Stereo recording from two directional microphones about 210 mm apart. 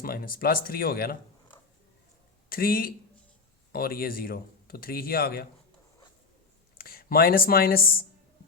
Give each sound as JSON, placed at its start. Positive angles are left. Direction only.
{"t": 0.0, "sound": "speech", "side_deg": 45}
{"t": 2.5, "sound": "speech", "side_deg": 45}
{"t": 6.7, "sound": "speech", "side_deg": 45}